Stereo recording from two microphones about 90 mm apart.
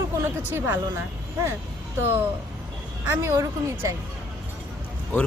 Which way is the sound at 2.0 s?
25° right (ahead or behind).